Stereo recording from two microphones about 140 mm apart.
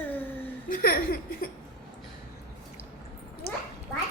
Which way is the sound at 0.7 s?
90° left.